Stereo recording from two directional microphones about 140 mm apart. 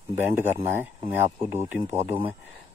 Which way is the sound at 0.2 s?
15° right (ahead or behind).